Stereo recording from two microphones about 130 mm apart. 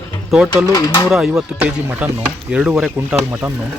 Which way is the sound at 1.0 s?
5° right (ahead or behind).